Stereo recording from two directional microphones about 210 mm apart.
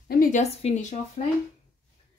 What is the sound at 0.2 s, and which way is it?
A woman's voice, 35° left (ahead or behind).